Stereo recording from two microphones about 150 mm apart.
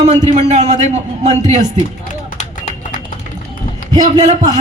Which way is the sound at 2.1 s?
55° left (ahead or behind).